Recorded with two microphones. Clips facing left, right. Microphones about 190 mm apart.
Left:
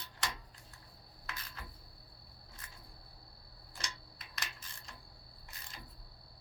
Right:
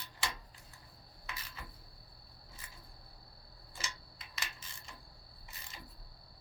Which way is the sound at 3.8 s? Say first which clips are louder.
Right 1 dB; 5° right (ahead or behind).